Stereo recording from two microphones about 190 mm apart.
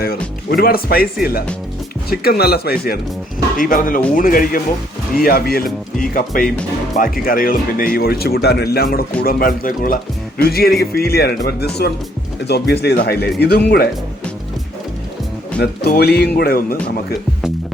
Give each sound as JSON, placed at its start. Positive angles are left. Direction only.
{"t": 0.0, "sound": "speech", "side_deg": 50}
{"t": 15.6, "sound": "speech", "side_deg": 55}